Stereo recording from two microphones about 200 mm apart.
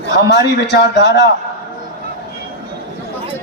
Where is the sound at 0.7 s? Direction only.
60° left (ahead or behind).